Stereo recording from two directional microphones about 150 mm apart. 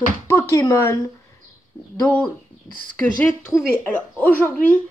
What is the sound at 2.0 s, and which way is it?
Speech, 10° left (ahead or behind).